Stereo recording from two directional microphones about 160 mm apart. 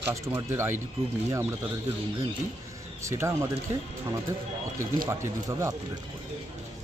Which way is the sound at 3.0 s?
15° right (ahead or behind).